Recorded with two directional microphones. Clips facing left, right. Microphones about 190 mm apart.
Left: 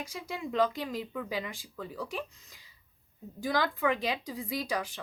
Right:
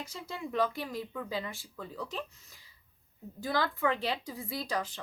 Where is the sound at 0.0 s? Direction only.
15° left (ahead or behind).